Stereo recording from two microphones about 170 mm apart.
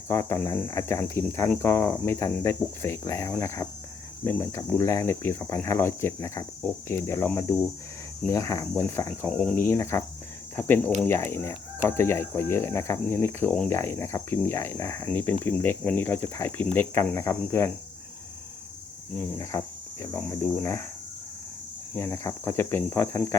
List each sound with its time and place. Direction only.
0.1 s speech: 15° left (ahead or behind)
8.3 s speech: 20° left (ahead or behind)
9.0 s speech: 5° left (ahead or behind)
19.5 s speech: 10° left (ahead or behind)
21.9 s speech: 15° left (ahead or behind)